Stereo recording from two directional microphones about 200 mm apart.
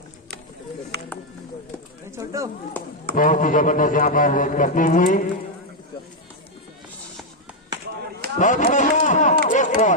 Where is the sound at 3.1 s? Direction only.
40° left (ahead or behind).